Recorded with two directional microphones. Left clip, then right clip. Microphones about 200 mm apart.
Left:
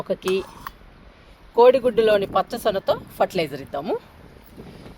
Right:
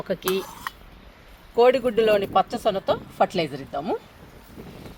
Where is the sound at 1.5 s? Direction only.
25° left (ahead or behind).